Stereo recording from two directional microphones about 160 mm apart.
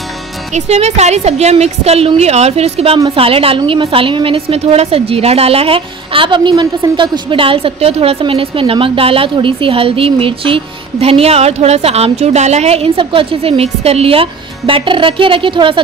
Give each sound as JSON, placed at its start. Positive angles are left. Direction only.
{"t": 0.6, "sound": "a woman's voice", "side_deg": -40}